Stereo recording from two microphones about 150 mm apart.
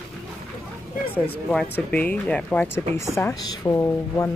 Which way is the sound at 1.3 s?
5° left (ahead or behind).